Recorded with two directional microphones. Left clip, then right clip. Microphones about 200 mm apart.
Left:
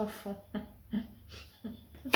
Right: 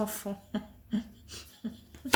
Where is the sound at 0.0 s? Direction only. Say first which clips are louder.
Right 3 dB; 55° right (ahead or behind).